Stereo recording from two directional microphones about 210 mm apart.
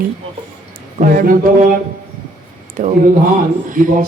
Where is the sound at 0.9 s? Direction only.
40° right (ahead or behind).